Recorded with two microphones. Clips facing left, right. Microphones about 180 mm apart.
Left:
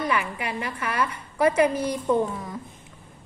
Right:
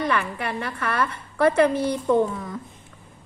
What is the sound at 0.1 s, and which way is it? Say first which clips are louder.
A woman's voice: right 1 dB; 10° left (ahead or behind).